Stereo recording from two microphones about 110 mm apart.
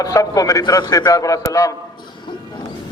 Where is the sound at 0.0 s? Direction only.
30° left (ahead or behind).